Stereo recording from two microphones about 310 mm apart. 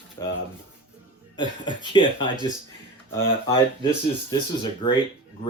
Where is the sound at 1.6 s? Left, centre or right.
Centre.